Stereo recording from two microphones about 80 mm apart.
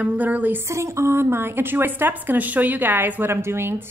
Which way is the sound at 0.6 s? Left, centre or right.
Right.